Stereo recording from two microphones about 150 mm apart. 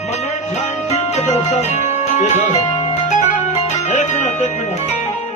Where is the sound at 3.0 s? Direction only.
55° left (ahead or behind).